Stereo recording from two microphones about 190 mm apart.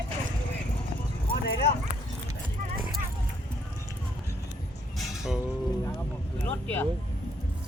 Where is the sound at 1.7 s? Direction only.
55° left (ahead or behind).